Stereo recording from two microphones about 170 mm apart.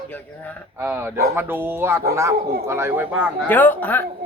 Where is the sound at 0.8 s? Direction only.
15° right (ahead or behind).